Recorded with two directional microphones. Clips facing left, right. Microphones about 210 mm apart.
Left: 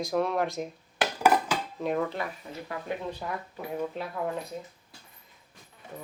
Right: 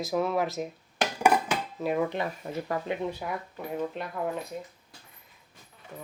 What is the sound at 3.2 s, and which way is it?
Speech, 10° right (ahead or behind).